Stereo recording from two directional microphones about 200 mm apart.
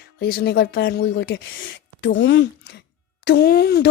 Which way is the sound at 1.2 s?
70° left (ahead or behind).